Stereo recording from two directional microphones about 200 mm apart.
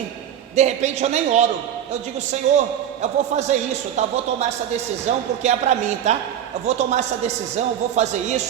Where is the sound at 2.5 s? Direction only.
35° right (ahead or behind).